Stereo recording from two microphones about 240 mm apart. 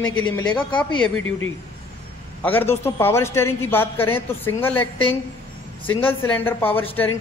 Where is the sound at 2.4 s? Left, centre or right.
Centre.